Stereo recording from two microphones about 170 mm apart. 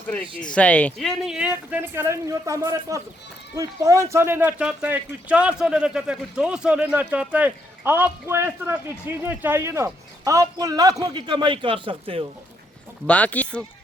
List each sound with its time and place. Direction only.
0.3 s speech: 5° left (ahead or behind); by 12.2 s 30° right (ahead or behind)
13.1 s speech: 10° left (ahead or behind)